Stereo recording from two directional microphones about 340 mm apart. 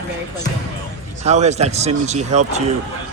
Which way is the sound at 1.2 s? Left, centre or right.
Centre.